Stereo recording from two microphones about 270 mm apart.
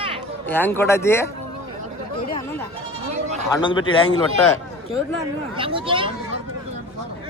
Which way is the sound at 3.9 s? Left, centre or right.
Centre.